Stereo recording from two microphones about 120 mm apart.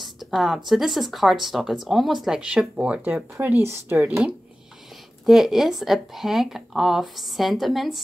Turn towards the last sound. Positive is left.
turn(degrees=0)  # may be behind; listen again after turning